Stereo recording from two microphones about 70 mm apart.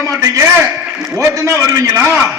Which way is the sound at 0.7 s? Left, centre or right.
Centre.